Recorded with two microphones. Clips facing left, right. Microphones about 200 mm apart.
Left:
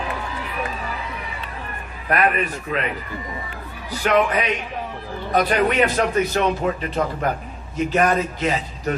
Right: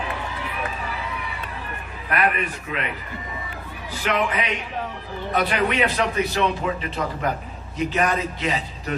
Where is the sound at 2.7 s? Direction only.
40° left (ahead or behind).